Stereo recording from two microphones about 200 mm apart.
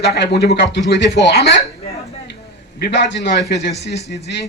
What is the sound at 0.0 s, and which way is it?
Speech, 55° left (ahead or behind).